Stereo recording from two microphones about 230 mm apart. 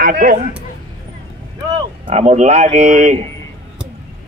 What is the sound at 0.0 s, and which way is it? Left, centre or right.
Speech, right.